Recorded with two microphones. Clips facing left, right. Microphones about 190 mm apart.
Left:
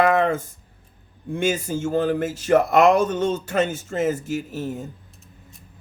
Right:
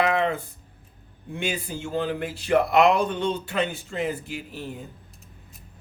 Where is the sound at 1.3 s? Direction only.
45° left (ahead or behind).